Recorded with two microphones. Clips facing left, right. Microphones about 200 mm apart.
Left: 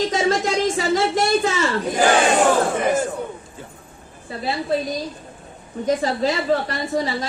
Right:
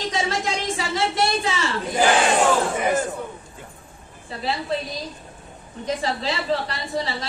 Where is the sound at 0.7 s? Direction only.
45° left (ahead or behind).